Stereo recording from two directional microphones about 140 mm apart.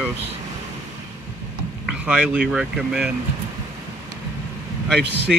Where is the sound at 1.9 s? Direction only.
5° right (ahead or behind).